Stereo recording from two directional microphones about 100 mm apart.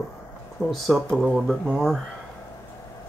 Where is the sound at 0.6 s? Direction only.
5° left (ahead or behind).